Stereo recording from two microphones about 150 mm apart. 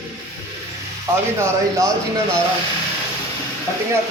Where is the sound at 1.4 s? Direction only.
20° right (ahead or behind).